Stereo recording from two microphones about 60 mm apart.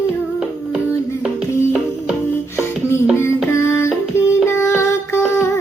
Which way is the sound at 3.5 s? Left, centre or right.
Left.